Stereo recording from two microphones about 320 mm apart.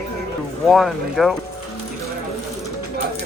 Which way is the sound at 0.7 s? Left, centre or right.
Centre.